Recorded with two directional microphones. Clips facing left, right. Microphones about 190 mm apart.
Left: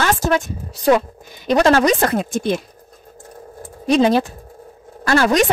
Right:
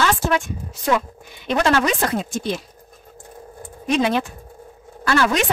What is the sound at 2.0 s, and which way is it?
Speech, 55° left (ahead or behind).